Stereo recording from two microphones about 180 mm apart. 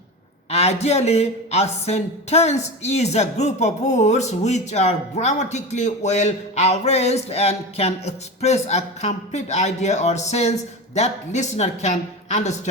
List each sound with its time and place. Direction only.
0.5 s speech: 35° left (ahead or behind)